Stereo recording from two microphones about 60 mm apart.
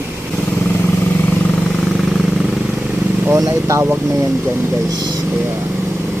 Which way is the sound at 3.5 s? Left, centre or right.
Right.